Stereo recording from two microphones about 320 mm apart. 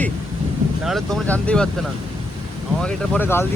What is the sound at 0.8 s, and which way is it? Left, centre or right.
Speech, centre.